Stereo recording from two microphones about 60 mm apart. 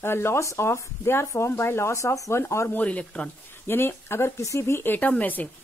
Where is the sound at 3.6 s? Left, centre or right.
Left.